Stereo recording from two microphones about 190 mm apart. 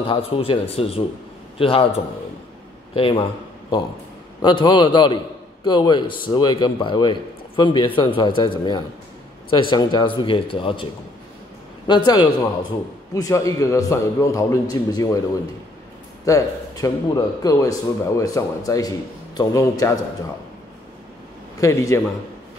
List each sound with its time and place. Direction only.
0.1 s a man's voice: 30° left (ahead or behind)
4.4 s a man's voice: 25° left (ahead or behind)
11.9 s a man's voice: 25° left (ahead or behind)
16.3 s a man's voice: 20° left (ahead or behind)
21.5 s a man's voice: 15° left (ahead or behind)